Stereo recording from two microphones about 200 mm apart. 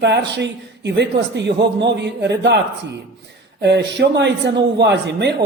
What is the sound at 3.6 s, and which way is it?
Speech, 60° right (ahead or behind).